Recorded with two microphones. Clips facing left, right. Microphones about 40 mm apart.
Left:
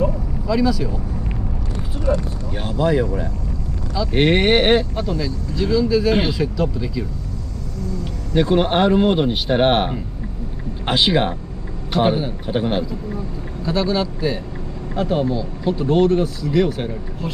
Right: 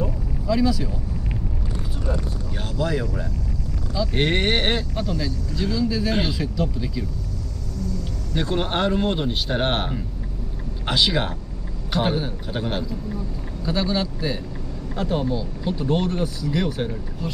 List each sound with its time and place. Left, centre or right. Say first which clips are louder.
0.5 s speech: left 3 dB; centre
2.5 s speech: left 7 dB; left
5.2 s speech: left 3 dB; centre
7.9 s speech: left 10 dB; left
11.9 s a man's voice: left 5 dB; centre
13.7 s speech: left 4 dB; centre